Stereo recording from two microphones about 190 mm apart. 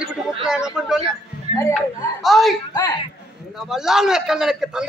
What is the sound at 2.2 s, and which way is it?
Speech, centre (ahead or behind).